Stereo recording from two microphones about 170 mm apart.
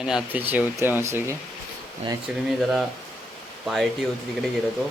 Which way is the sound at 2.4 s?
Centre (ahead or behind).